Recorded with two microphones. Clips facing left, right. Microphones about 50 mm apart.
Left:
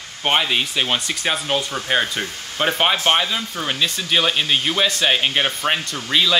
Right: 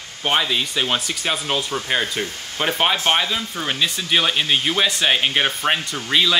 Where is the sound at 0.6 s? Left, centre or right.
Centre.